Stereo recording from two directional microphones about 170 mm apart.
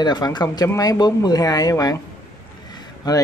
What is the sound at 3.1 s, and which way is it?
Speech, 25° left (ahead or behind).